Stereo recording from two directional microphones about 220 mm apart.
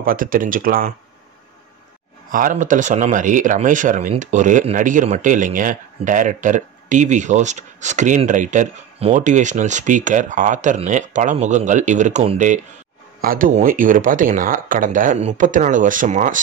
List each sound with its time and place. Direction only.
0.0 s speech: 40° right (ahead or behind)
2.3 s speech: 35° right (ahead or behind)